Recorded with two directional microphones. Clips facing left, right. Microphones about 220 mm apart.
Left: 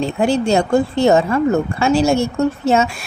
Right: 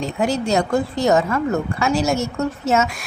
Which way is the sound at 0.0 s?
30° left (ahead or behind).